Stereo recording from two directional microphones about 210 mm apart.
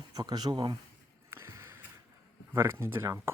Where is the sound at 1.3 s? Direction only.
15° right (ahead or behind).